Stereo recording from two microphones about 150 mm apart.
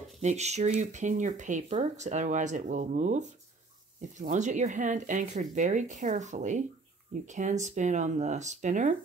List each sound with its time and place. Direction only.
0.2 s speech: 50° right (ahead or behind)